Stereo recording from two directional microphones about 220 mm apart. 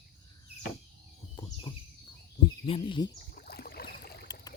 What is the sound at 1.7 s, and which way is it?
Speech, 20° left (ahead or behind).